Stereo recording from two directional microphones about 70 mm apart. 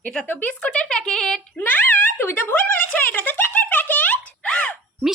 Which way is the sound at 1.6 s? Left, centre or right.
Left.